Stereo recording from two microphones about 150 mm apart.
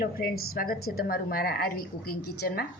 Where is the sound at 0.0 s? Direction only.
75° left (ahead or behind).